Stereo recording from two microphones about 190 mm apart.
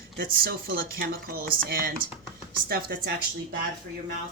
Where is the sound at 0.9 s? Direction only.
55° right (ahead or behind).